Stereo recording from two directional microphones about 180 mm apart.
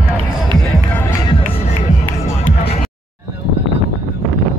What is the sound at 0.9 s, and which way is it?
Music, 10° left (ahead or behind).